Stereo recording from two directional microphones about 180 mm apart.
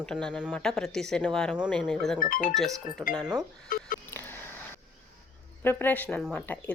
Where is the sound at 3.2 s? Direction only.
20° right (ahead or behind).